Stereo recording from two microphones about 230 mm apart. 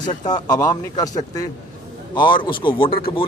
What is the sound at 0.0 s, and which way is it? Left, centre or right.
A man's voice, centre.